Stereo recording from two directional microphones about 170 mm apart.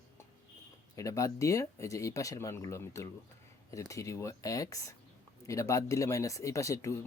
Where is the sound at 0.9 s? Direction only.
20° left (ahead or behind).